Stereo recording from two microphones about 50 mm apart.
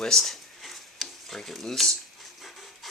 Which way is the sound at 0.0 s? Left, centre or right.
Centre.